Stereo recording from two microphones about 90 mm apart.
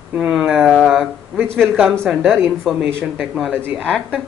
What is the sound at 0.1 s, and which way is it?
Speech, 10° right (ahead or behind).